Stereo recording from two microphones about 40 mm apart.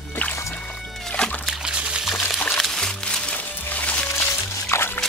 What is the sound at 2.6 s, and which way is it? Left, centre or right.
Music, centre.